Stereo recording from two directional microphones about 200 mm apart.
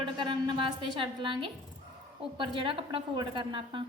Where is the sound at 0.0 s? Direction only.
25° right (ahead or behind).